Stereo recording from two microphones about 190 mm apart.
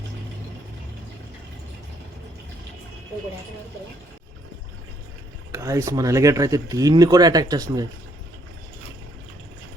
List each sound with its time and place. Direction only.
5.5 s speech: 15° right (ahead or behind)